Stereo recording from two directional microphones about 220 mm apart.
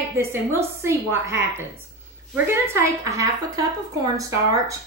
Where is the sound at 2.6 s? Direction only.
15° right (ahead or behind).